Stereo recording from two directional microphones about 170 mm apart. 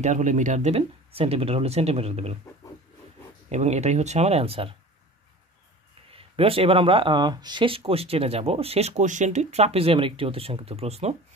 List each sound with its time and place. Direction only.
0.0 s speech: 45° right (ahead or behind)
3.4 s speech: 40° right (ahead or behind)
6.1 s speech: 35° right (ahead or behind)